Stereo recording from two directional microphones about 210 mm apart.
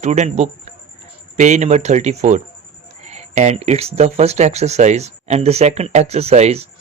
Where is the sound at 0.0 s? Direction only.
35° right (ahead or behind).